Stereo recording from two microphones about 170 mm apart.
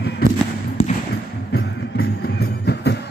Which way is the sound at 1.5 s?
70° left (ahead or behind).